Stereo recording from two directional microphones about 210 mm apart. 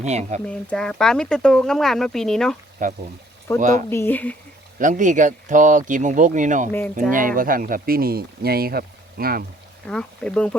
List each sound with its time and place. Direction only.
0.0 s speech: 30° right (ahead or behind)
0.4 s speech: 5° left (ahead or behind)
2.8 s speech: 35° right (ahead or behind)
3.8 s speech: 10° left (ahead or behind)
4.8 s speech: 35° right (ahead or behind)
6.7 s speech: 10° left (ahead or behind)
7.1 s speech: 40° right (ahead or behind)
9.9 s speech: 5° left (ahead or behind)